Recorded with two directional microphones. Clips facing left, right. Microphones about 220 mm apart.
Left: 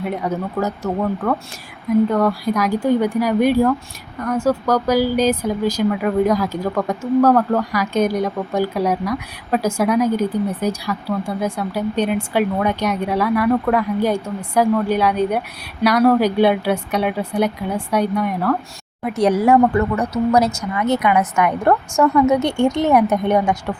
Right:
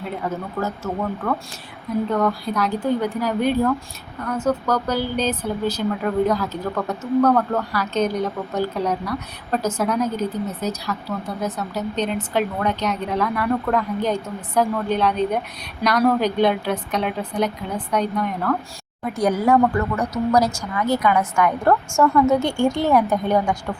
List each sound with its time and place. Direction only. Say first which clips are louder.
0.0 s speech: left 5 dB; 15° left (ahead or behind)
2.1 s speech: left 3 dB; 10° left (ahead or behind)
19.0 s a woman's voice: left 4 dB; 25° left (ahead or behind)
20.3 s a woman's voice: left 2 dB; 25° left (ahead or behind)